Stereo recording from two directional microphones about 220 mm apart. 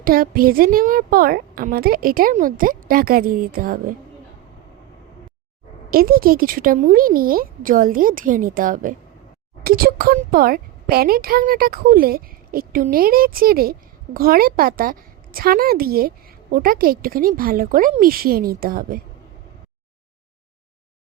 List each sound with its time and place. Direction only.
0.0 s speech: 40° right (ahead or behind)
5.9 s speech: 40° right (ahead or behind)